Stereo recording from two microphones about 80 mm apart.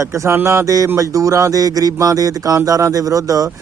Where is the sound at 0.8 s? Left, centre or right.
Right.